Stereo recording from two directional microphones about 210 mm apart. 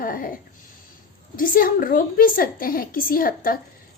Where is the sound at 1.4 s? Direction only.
40° left (ahead or behind).